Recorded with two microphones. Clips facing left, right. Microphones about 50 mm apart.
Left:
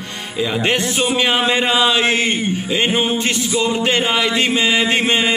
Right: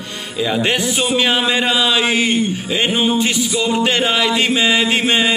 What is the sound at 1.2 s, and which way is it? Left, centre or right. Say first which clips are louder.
Speech: even; centre.